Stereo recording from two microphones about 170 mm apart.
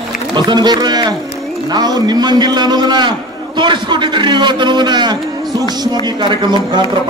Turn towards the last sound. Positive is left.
turn(degrees=-30)  # may be behind; listen again after turning